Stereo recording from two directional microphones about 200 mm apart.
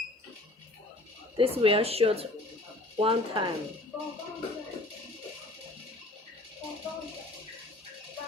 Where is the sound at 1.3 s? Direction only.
30° right (ahead or behind).